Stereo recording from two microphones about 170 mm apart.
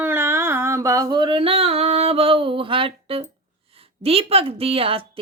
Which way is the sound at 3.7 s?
35° right (ahead or behind).